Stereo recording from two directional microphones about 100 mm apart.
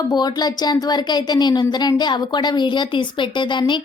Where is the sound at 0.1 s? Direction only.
45° left (ahead or behind).